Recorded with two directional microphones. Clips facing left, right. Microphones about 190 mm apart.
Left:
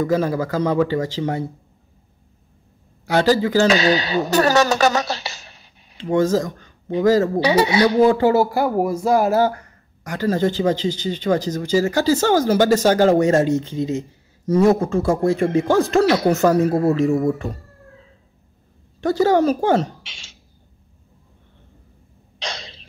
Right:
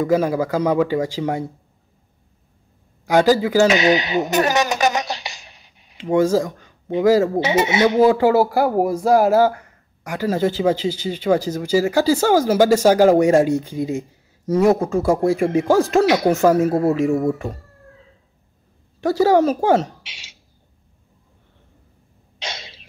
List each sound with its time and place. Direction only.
0.0 s speech: 10° right (ahead or behind)
3.1 s speech: 10° right (ahead or behind)
7.4 s a man's voice: 20° right (ahead or behind)
8.0 s speech: 5° right (ahead or behind)
10.0 s speech: 10° right (ahead or behind)
18.9 s a woman's voice: 5° right (ahead or behind)
22.4 s throat clearing: 10° right (ahead or behind)